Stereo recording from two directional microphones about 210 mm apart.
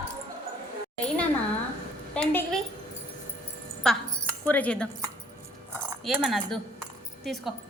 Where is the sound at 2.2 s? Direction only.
5° left (ahead or behind).